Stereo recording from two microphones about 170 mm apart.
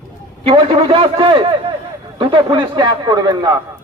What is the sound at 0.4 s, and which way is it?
Speech, 30° right (ahead or behind).